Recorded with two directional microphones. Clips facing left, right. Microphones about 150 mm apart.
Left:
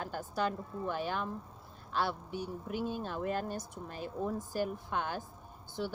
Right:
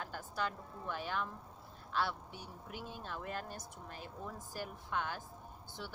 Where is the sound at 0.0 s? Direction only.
40° left (ahead or behind).